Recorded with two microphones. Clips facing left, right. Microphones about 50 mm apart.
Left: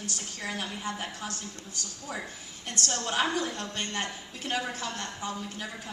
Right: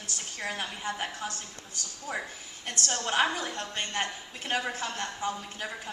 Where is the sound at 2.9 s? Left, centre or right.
Right.